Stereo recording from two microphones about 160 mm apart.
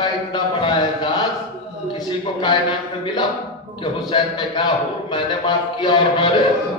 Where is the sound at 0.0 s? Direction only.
30° left (ahead or behind).